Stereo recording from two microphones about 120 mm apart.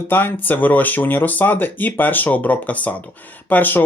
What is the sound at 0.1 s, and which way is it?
Speech, 20° left (ahead or behind).